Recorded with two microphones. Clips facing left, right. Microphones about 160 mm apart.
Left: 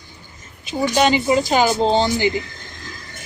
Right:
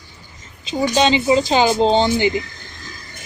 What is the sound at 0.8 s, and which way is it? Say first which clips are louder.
Speech: right 1 dB; 20° right (ahead or behind).